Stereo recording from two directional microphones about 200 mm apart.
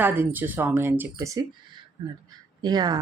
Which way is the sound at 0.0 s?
10° right (ahead or behind).